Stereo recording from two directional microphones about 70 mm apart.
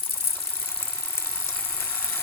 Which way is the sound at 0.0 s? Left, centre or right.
Left.